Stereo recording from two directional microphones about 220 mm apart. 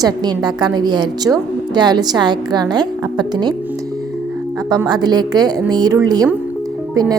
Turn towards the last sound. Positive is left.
turn(degrees=-15)  # may be behind; listen again after turning